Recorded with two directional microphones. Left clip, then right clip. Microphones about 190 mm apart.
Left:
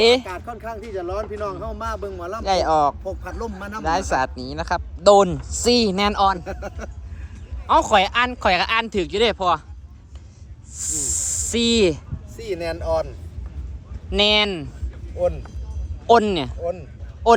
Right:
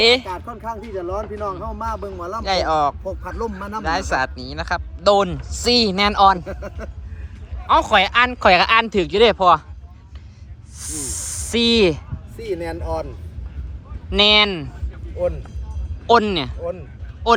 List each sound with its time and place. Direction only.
0.0 s speech: 20° left (ahead or behind)
0.4 s speech: centre (ahead or behind)
2.4 s speech: 20° left (ahead or behind)
3.0 s speech: centre (ahead or behind)
3.8 s speech: 20° left (ahead or behind); by 6.7 s centre (ahead or behind)
7.7 s speech: 20° left (ahead or behind); by 9.6 s 5° left (ahead or behind)
10.8 s speech: 5° left (ahead or behind)
14.1 s speech: 10° left (ahead or behind)
16.0 s speech: 10° left (ahead or behind)